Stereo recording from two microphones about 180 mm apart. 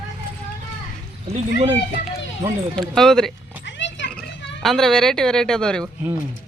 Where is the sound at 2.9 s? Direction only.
5° left (ahead or behind).